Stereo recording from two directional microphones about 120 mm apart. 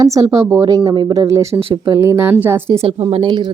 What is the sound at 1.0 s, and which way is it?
Speech, 25° right (ahead or behind).